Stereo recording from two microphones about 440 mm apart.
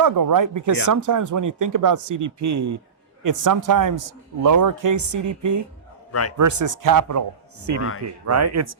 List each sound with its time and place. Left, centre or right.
0.0 s a man's voice: right
6.1 s a man's voice: left
6.3 s speech: right
7.8 s speech: left
8.3 s speech: right